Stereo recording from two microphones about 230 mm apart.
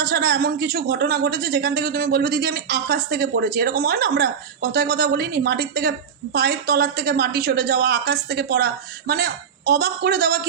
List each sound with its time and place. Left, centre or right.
0.0 s a woman's voice: right